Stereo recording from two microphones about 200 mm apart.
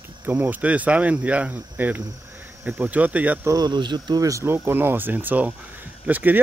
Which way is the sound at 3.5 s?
20° right (ahead or behind).